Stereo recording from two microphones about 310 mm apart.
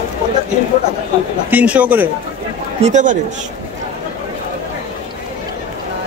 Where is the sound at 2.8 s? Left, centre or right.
Right.